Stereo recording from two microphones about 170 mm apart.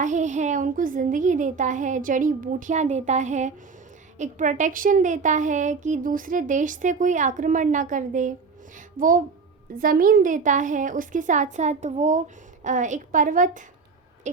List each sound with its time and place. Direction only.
0.0 s speech: 45° right (ahead or behind)